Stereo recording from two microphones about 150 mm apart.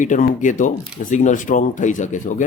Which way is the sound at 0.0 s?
60° left (ahead or behind).